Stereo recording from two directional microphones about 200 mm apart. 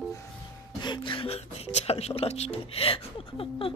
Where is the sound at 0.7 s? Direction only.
20° left (ahead or behind).